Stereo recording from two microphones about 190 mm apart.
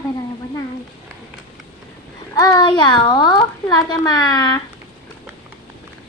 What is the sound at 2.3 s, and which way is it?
A child's voice, 20° left (ahead or behind).